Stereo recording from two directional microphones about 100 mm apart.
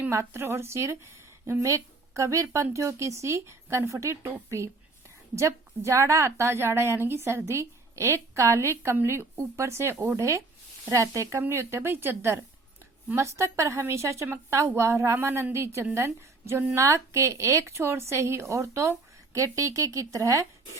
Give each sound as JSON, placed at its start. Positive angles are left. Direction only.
{"t": 0.1, "sound": "a woman's voice", "side_deg": -25}